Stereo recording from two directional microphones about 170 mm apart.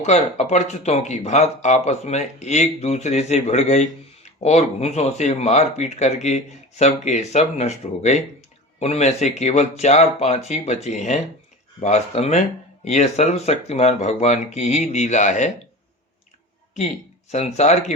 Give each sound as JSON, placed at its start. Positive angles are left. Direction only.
{"t": 0.0, "sound": "speech", "side_deg": 40}
{"t": 17.3, "sound": "speech", "side_deg": 40}